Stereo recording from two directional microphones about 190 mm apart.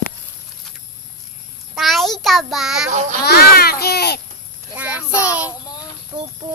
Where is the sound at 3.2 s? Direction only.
55° left (ahead or behind).